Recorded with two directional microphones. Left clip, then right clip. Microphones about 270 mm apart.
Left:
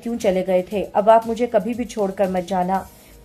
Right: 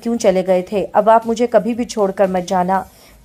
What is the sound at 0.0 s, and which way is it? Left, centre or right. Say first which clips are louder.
A woman's voice: right 5 dB; centre.